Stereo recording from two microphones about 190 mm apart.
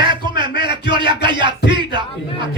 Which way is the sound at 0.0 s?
25° right (ahead or behind).